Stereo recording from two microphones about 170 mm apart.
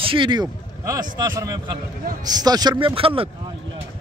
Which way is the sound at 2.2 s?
25° right (ahead or behind).